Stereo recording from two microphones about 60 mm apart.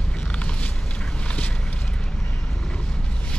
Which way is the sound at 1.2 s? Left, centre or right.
Centre.